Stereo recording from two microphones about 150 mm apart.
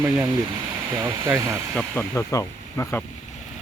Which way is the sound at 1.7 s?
10° left (ahead or behind).